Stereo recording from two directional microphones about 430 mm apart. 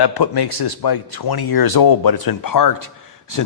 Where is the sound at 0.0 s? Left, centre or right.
Left.